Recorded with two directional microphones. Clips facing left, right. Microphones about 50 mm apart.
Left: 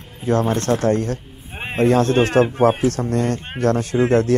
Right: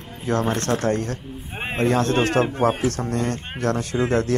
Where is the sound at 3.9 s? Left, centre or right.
Centre.